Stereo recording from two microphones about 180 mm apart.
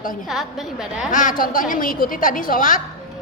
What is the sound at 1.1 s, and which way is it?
A woman's voice, 45° left (ahead or behind).